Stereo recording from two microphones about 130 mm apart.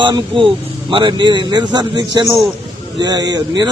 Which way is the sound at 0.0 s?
40° right (ahead or behind).